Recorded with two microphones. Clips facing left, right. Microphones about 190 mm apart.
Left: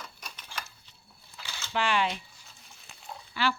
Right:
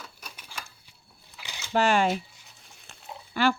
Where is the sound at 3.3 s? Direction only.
50° right (ahead or behind).